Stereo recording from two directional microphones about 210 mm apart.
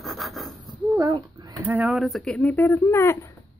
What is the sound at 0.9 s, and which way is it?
Speech, 15° right (ahead or behind).